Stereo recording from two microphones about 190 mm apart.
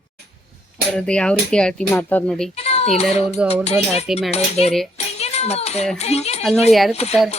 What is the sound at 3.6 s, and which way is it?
Speech, 35° left (ahead or behind).